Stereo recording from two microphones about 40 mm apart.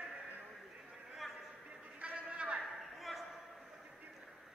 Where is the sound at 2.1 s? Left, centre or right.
Right.